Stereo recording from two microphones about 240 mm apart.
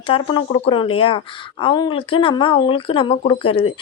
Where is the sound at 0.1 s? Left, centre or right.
Left.